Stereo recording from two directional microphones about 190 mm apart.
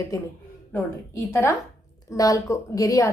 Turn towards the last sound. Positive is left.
turn(degrees=15)  # may be behind; listen again after turning